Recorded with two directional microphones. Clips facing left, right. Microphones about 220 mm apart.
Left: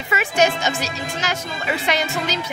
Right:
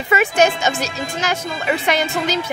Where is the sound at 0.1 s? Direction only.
50° right (ahead or behind).